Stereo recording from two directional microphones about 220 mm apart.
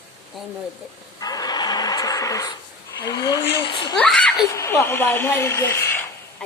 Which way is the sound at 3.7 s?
20° left (ahead or behind).